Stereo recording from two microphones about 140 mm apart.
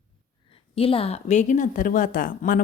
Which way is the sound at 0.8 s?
40° left (ahead or behind).